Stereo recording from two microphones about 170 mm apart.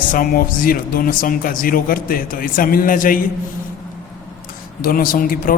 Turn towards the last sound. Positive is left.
turn(degrees=55)  # may be behind; listen again after turning